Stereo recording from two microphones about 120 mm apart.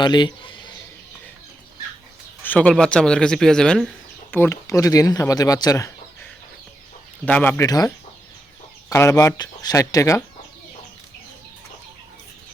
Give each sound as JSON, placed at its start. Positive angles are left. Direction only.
{"t": 0.0, "sound": "speech", "side_deg": 40}
{"t": 2.4, "sound": "speech", "side_deg": 10}
{"t": 4.3, "sound": "speech", "side_deg": 20}
{"t": 7.3, "sound": "speech", "side_deg": 15}
{"t": 7.6, "sound": "speech", "side_deg": 30}
{"t": 8.9, "sound": "speech", "side_deg": 25}